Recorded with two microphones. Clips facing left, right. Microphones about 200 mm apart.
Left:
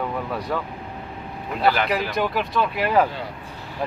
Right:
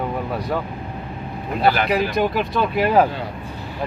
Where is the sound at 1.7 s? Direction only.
15° right (ahead or behind).